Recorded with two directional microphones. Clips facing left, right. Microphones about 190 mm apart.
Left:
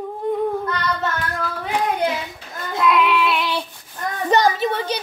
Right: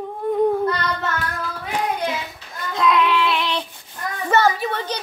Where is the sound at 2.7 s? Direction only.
5° left (ahead or behind).